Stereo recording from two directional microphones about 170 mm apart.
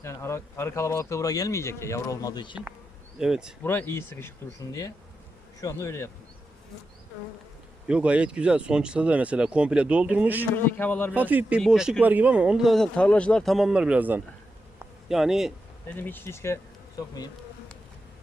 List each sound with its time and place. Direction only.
0.0 s speech: 15° left (ahead or behind)
3.2 s speech: 5° right (ahead or behind)
3.6 s speech: 15° left (ahead or behind)
5.5 s speech: 20° left (ahead or behind)
7.9 s speech: 5° right (ahead or behind)
10.7 s speech: 10° left (ahead or behind)
11.1 s speech: 10° right (ahead or behind)
16.0 s speech: 10° left (ahead or behind)